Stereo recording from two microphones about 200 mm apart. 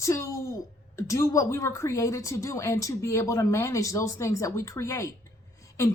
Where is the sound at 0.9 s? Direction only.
15° left (ahead or behind).